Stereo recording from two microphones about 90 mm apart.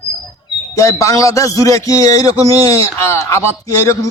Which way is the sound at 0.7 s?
40° left (ahead or behind).